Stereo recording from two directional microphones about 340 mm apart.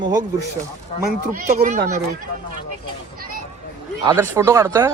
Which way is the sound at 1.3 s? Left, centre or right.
Right.